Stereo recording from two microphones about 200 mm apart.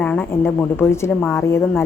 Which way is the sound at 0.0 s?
5° left (ahead or behind).